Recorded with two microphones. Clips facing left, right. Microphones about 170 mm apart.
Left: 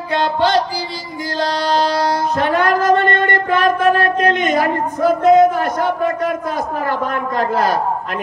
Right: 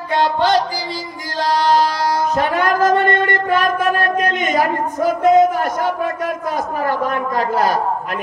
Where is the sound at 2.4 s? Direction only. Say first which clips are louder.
Left 3 dB; 50° right (ahead or behind).